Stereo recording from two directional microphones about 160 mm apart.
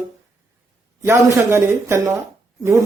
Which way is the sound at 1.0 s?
15° right (ahead or behind).